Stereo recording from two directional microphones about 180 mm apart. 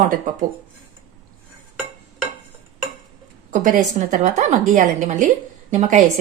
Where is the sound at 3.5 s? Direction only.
45° right (ahead or behind).